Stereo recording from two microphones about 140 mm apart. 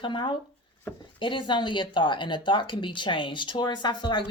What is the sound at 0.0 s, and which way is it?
Speech, 35° left (ahead or behind).